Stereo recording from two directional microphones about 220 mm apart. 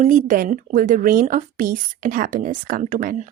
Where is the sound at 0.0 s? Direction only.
35° right (ahead or behind).